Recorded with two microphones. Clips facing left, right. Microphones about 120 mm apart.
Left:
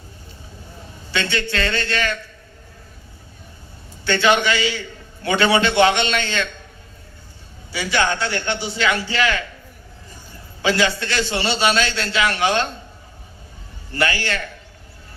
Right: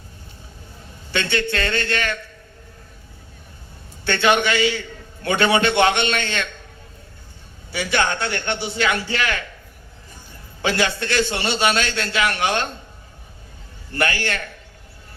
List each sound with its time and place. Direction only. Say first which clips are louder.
1.1 s a man's voice: right 1 dB; 55° right (ahead or behind)
4.0 s a man's voice: left 1 dB; 55° right (ahead or behind)
7.7 s a man's voice: left 1 dB; 55° right (ahead or behind)
10.6 s a man's voice: left 2 dB; 55° right (ahead or behind)
13.9 s a man's voice: left 1 dB; 55° right (ahead or behind)